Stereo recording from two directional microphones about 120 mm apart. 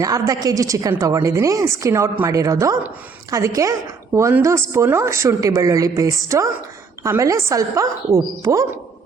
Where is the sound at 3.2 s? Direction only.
25° right (ahead or behind).